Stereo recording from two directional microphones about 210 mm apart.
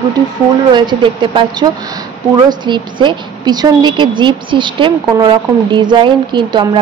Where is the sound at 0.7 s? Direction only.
20° right (ahead or behind).